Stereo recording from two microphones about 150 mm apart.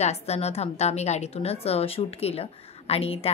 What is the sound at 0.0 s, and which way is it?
A woman's voice, 45° left (ahead or behind).